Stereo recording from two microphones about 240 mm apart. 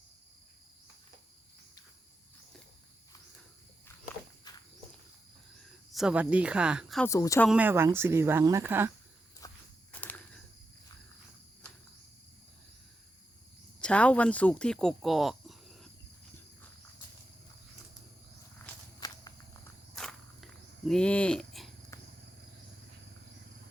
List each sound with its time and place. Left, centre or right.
4.5 s walk: centre
5.9 s speech: centre
7.1 s speech: centre
7.4 s speech: centre
9.4 s walk: centre
9.9 s cricket: centre
13.8 s speech: centre
18.9 s walk: centre
20.0 s walk: centre